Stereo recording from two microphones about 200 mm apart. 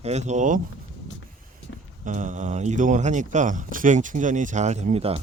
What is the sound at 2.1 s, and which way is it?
Speech, 40° right (ahead or behind).